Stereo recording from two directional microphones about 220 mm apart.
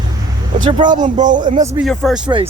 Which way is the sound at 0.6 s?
20° right (ahead or behind).